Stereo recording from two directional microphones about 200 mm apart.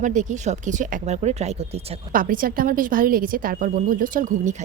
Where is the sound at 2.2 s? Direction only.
45° right (ahead or behind).